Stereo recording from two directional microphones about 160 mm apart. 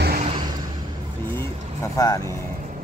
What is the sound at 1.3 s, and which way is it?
Vehicle, 20° left (ahead or behind).